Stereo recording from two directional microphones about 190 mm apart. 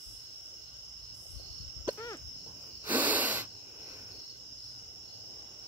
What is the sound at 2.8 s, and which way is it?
Wheeze, 10° right (ahead or behind).